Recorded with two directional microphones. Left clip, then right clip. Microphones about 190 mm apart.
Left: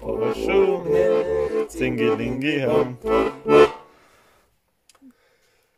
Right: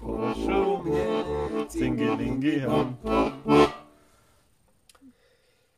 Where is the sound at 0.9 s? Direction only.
10° right (ahead or behind).